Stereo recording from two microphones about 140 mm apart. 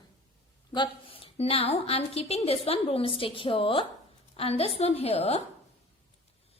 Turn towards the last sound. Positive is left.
turn(degrees=45)  # may be behind; listen again after turning